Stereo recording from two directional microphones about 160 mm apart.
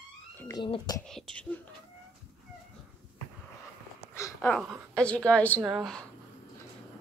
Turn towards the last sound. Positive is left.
turn(degrees=-10)  # may be behind; listen again after turning